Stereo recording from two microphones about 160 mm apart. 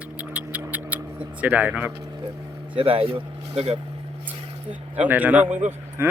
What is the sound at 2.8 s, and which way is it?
Speech, 35° right (ahead or behind).